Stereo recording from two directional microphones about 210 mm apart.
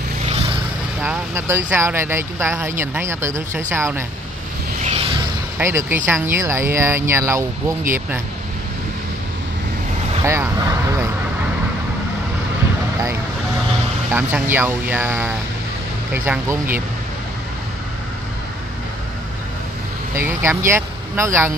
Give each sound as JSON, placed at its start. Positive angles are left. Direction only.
{"t": 0.3, "sound": "vehicle", "side_deg": -30}
{"t": 1.0, "sound": "speech", "side_deg": -10}
{"t": 4.8, "sound": "vehicle", "side_deg": -30}
{"t": 5.6, "sound": "speech", "side_deg": -10}
{"t": 10.2, "sound": "speech", "side_deg": -15}
{"t": 14.1, "sound": "speech", "side_deg": -10}
{"t": 20.2, "sound": "speech", "side_deg": -10}